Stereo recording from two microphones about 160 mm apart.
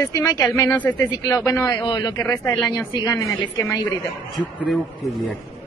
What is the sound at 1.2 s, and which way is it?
Speech, 20° left (ahead or behind).